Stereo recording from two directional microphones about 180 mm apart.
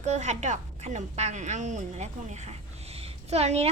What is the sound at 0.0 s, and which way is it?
A woman's voice, 40° right (ahead or behind).